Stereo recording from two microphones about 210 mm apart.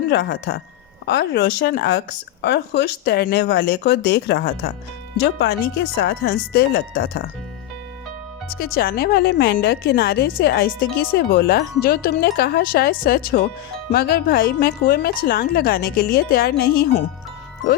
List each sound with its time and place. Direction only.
0.1 s speech: 50° left (ahead or behind)
8.4 s speech: 45° left (ahead or behind)